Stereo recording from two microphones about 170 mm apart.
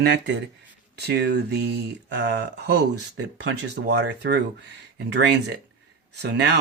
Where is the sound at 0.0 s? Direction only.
85° right.